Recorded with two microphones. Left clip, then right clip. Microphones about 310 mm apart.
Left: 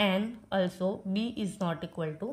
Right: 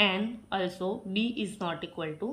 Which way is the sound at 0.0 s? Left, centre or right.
Left.